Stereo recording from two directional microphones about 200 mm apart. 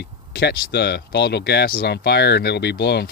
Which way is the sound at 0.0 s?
55° left (ahead or behind).